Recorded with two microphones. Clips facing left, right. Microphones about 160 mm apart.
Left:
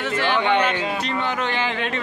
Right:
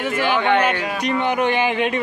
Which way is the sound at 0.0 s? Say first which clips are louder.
Right 2 dB; 10° right (ahead or behind).